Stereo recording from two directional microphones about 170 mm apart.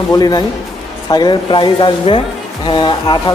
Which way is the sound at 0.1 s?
25° left (ahead or behind).